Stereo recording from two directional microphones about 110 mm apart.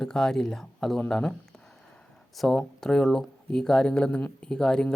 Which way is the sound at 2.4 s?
5° left (ahead or behind).